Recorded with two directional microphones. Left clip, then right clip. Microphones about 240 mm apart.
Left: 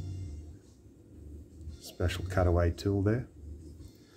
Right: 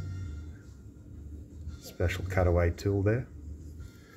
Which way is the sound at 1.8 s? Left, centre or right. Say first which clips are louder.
Right 2 dB; centre.